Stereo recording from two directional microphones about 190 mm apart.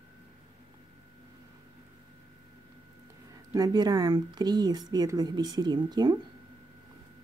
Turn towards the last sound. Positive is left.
turn(degrees=-20)  # may be behind; listen again after turning